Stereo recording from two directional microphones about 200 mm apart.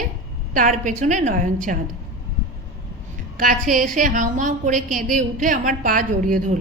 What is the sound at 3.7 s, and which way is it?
A woman's voice, 40° right (ahead or behind).